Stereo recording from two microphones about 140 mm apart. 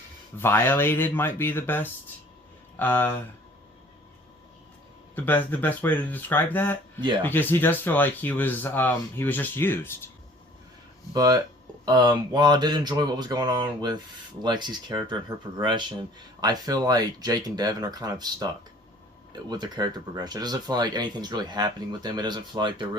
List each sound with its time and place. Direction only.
0.3 s speech: 15° left (ahead or behind)
5.1 s speech: 15° left (ahead or behind)
11.1 s speech: 30° right (ahead or behind)